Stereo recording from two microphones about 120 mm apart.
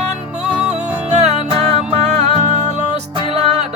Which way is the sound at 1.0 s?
60° right (ahead or behind).